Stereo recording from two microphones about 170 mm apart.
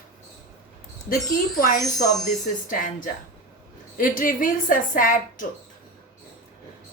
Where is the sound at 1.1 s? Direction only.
55° left (ahead or behind).